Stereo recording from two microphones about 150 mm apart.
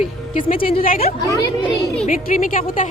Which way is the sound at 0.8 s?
75° left (ahead or behind).